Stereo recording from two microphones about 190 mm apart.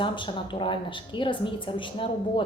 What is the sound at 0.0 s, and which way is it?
A woman's voice, 25° left (ahead or behind).